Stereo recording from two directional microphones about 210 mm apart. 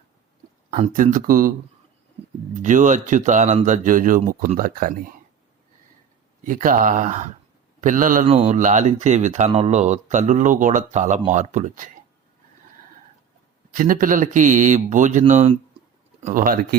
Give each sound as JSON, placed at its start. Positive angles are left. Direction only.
{"t": 0.7, "sound": "speech", "side_deg": -35}
{"t": 2.6, "sound": "speech", "side_deg": -35}
{"t": 6.4, "sound": "speech", "side_deg": -40}
{"t": 13.7, "sound": "speech", "side_deg": -40}